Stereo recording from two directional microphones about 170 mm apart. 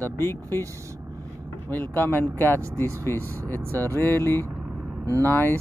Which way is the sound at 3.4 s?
20° right (ahead or behind).